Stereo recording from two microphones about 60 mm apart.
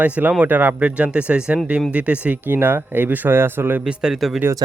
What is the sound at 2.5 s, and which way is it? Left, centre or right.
Speech, right.